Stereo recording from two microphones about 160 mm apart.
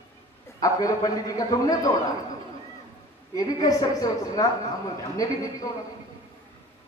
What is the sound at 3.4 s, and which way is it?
A man's voice, 25° left (ahead or behind).